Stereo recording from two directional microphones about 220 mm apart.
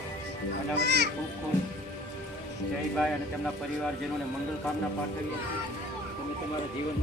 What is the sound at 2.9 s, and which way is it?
Speech, centre (ahead or behind).